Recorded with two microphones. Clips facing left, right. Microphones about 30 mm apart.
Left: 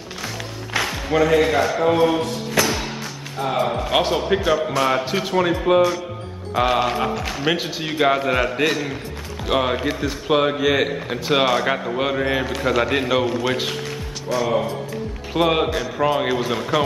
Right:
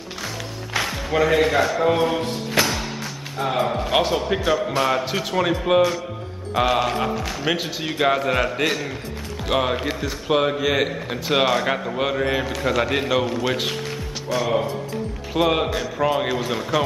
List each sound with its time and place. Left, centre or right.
0.7 s music: centre
1.1 s a man's voice: centre
2.6 s music: right
3.3 s a man's voice: centre
3.9 s a man's voice: centre
15.3 s a man's voice: centre